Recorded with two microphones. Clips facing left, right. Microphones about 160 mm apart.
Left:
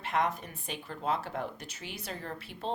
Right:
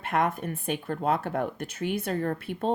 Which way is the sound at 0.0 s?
55° right (ahead or behind).